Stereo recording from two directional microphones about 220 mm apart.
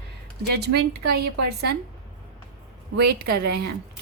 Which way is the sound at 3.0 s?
45° right (ahead or behind).